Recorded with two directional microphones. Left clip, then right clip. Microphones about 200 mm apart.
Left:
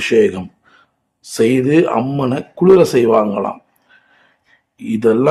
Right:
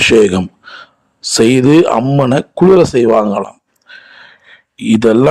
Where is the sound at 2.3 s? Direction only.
40° right (ahead or behind).